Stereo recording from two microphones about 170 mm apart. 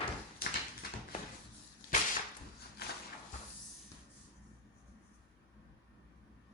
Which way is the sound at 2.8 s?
65° left (ahead or behind).